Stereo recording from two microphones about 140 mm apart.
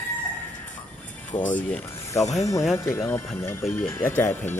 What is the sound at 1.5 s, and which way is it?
Speech, 10° left (ahead or behind).